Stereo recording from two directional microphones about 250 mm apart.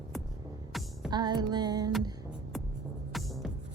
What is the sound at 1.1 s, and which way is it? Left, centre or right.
Music, centre.